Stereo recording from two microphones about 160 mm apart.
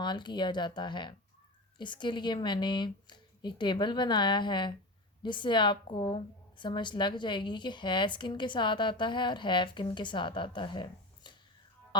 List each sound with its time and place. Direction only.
0.0 s a woman's voice: 30° left (ahead or behind)